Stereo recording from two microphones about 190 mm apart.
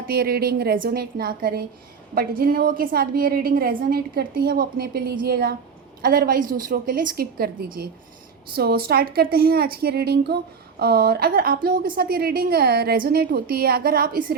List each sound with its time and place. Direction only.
0.1 s a woman's voice: 55° right (ahead or behind)